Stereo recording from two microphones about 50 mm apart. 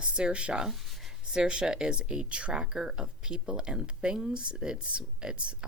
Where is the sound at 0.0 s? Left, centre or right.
Centre.